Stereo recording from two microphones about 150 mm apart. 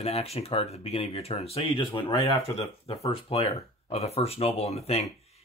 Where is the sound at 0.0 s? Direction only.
45° left (ahead or behind).